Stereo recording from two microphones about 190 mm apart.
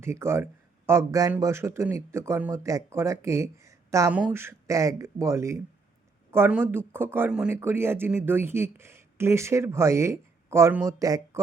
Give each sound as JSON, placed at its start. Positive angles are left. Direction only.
{"t": 0.0, "sound": "speech", "side_deg": -15}